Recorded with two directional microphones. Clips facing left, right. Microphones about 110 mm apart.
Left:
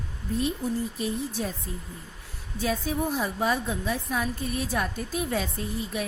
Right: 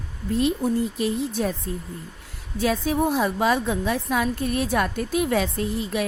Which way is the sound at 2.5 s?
80° right.